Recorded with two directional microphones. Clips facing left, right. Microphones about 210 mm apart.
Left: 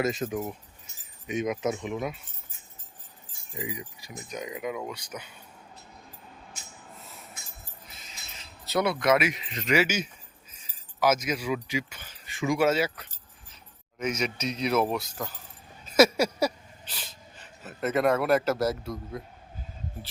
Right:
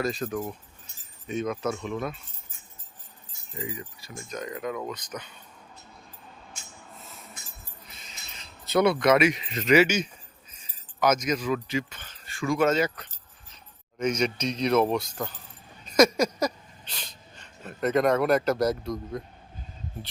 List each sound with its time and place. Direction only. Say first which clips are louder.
0.0 s speech: left 1 dB; 20° left (ahead or behind)
3.5 s speech: even; 15° left (ahead or behind)
8.6 s speech: right 4 dB; centre (ahead or behind)
15.8 s a sound: even; 5° left (ahead or behind)
17.3 s speech: right 4 dB; 5° left (ahead or behind)